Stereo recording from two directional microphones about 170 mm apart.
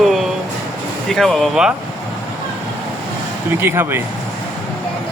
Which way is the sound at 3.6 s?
15° right (ahead or behind).